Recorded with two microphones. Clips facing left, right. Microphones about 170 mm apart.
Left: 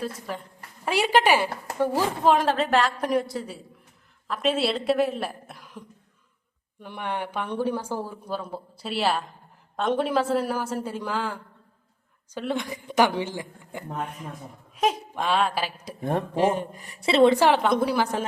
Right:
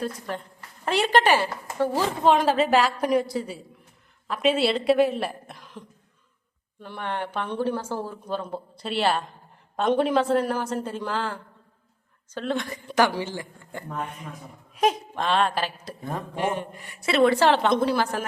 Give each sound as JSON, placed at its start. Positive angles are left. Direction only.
{"t": 0.0, "sound": "a woman's voice", "side_deg": 5}
{"t": 2.2, "sound": "a woman's voice", "side_deg": 0}
{"t": 13.9, "sound": "a woman's voice", "side_deg": 0}
{"t": 16.3, "sound": "a man's voice", "side_deg": 35}
{"t": 17.3, "sound": "speech", "side_deg": 15}